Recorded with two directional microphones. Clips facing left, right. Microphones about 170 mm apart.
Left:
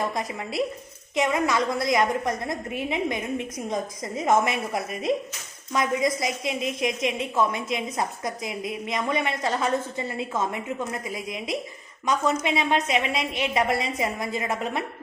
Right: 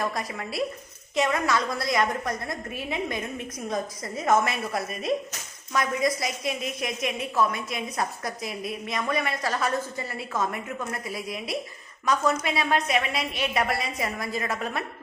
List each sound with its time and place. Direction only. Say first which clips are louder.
0.0 s a woman's voice: left 1 dB; 20° left (ahead or behind)